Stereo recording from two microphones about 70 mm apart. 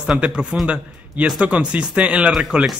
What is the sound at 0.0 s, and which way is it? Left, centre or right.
Speech, centre.